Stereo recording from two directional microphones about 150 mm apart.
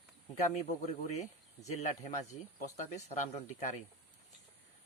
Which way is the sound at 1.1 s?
50° left (ahead or behind).